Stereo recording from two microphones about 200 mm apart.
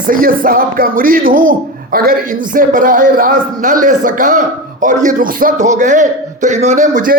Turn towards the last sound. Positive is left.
turn(degrees=-40)  # may be behind; listen again after turning